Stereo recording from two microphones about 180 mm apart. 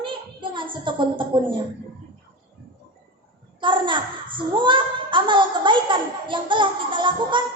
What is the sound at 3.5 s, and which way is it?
A child's voice, 25° right (ahead or behind).